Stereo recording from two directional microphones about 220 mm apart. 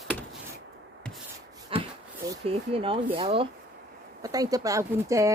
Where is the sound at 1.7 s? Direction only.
25° right (ahead or behind).